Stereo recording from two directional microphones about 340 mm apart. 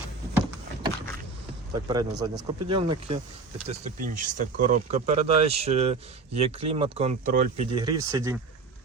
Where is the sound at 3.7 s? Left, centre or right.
Right.